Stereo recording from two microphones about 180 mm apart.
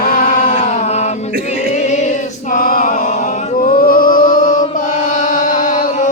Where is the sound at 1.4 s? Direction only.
40° left (ahead or behind).